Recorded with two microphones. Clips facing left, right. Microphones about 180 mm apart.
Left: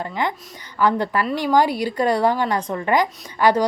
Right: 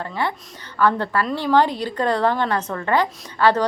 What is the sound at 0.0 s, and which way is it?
A woman's voice, 15° left (ahead or behind).